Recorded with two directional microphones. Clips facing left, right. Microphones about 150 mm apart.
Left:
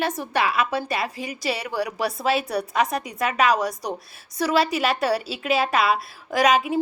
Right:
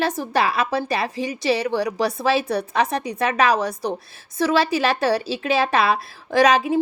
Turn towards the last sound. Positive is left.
turn(degrees=-30)  # may be behind; listen again after turning